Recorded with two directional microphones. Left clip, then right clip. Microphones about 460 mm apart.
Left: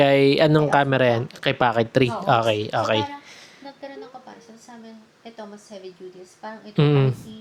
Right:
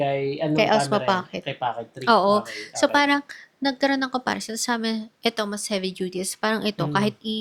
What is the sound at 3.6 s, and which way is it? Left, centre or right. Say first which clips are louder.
A woman's voice: right 16 dB; right.